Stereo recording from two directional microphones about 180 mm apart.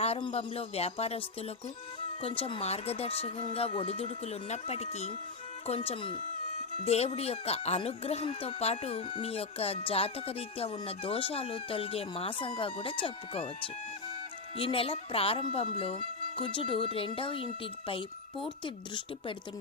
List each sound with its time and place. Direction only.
0.0 s speech: 35° left (ahead or behind)
2.2 s speech: 30° left (ahead or behind)